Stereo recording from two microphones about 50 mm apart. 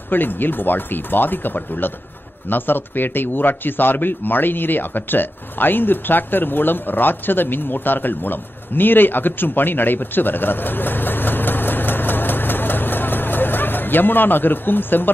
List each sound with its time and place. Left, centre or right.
0.1 s speech: left